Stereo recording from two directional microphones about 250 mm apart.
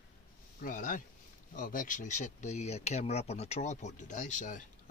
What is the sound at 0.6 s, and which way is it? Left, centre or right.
Speech, left.